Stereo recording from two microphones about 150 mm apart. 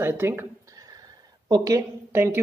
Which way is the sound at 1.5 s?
25° right (ahead or behind).